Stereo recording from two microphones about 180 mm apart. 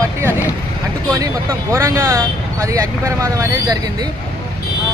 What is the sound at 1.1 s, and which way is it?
Speech, 15° right (ahead or behind).